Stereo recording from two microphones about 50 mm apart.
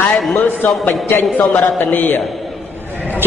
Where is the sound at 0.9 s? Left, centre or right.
Left.